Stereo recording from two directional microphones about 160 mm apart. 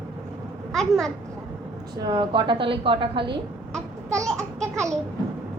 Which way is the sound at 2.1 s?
30° right (ahead or behind).